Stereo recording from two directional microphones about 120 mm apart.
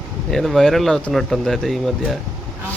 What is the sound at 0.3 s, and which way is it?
Speech, centre (ahead or behind).